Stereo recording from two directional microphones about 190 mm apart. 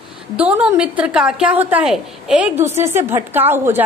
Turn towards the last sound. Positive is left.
turn(degrees=-10)  # may be behind; listen again after turning